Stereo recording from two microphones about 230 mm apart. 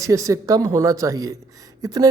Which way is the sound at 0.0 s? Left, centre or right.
Centre.